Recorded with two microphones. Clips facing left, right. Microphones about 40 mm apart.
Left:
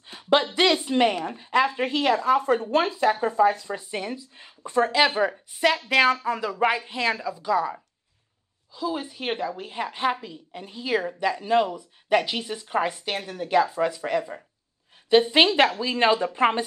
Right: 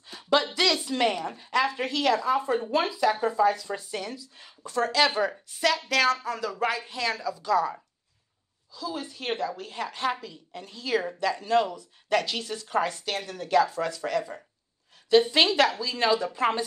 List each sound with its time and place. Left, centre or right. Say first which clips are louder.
0.0 s a sound: left 3 dB; left
0.6 s speech: left 4 dB; left
2.3 s a woman's voice: left 4 dB; left; by 7.8 s centre
8.7 s speech: left 5 dB; left